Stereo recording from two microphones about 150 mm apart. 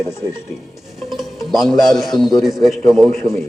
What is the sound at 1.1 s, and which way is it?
A man's voice, centre (ahead or behind).